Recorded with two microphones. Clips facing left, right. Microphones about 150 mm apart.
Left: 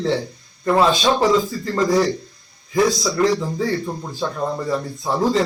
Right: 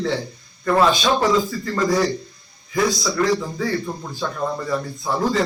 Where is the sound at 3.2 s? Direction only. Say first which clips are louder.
Left 2 dB; 30° left (ahead or behind).